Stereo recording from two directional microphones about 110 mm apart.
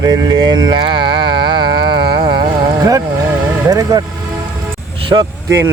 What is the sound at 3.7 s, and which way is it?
Speech, 35° right (ahead or behind).